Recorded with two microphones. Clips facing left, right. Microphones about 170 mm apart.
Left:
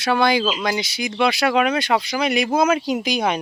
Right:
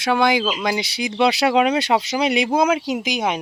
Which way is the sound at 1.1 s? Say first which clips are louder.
Right 2 dB; 20° right (ahead or behind).